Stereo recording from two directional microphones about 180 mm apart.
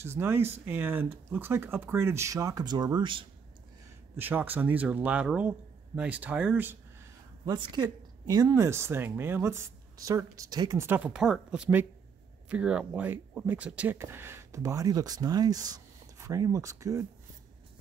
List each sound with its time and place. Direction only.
0.0 s speech: 15° right (ahead or behind)
4.2 s speech: 10° right (ahead or behind)
7.4 s speech: 25° right (ahead or behind)